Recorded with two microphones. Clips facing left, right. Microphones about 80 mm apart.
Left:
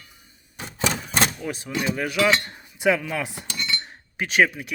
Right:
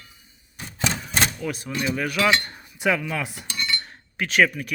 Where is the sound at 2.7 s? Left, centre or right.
Left.